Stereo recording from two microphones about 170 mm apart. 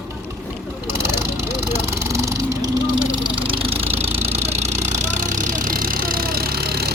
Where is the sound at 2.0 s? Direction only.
15° right (ahead or behind).